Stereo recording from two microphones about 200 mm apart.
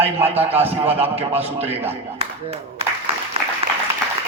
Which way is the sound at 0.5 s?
30° right (ahead or behind).